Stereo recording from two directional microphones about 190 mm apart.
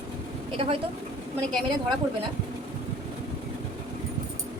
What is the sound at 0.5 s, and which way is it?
Speech, 30° right (ahead or behind).